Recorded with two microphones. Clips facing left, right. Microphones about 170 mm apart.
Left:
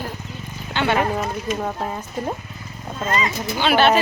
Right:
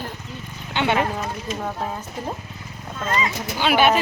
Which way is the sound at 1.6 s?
5° left (ahead or behind).